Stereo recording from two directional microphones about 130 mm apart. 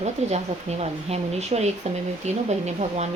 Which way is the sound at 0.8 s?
55° right (ahead or behind).